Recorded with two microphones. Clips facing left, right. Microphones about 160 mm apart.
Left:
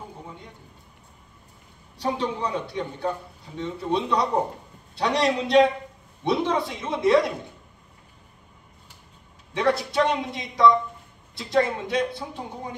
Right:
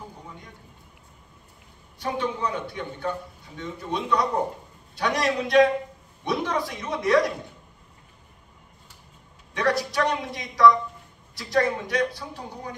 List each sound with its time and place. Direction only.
2.0 s a man's voice: 30° left (ahead or behind)
9.5 s a man's voice: 25° left (ahead or behind)